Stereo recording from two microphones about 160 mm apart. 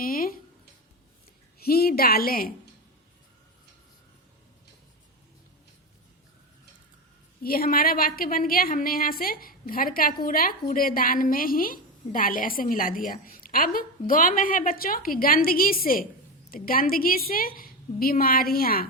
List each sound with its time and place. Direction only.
0.0 s a sound: 60° left (ahead or behind)
1.5 s a woman's voice: 70° left (ahead or behind)
7.4 s a woman's voice: 65° left (ahead or behind)